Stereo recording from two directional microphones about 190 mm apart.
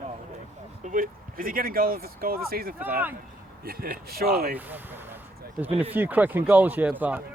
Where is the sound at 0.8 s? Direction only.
45° right (ahead or behind).